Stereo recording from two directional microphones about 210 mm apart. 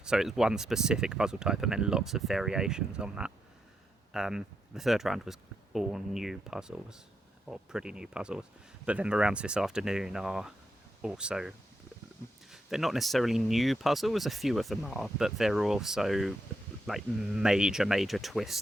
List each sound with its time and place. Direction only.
0.0 s speech: centre (ahead or behind)